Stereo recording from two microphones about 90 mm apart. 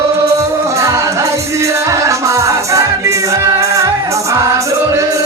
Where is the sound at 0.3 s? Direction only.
40° right (ahead or behind).